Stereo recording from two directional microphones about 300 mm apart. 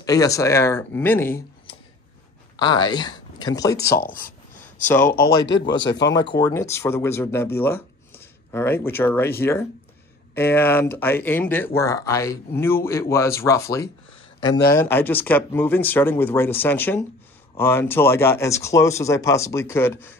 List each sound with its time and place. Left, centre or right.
0.0 s speech: centre
2.5 s speech: centre
4.0 s speech: left
6.3 s speech: centre